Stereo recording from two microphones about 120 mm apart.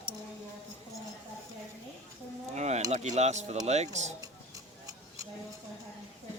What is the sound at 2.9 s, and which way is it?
Speech, 70° right (ahead or behind).